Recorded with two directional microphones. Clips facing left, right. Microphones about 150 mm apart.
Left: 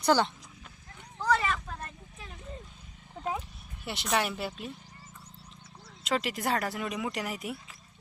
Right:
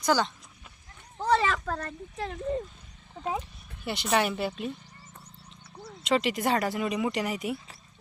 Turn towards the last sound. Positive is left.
turn(degrees=0)  # may be behind; listen again after turning